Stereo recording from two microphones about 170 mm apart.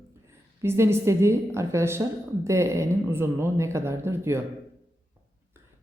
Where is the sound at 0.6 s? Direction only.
15° right (ahead or behind).